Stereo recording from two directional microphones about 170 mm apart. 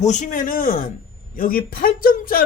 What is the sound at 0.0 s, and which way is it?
Speech, 45° left (ahead or behind).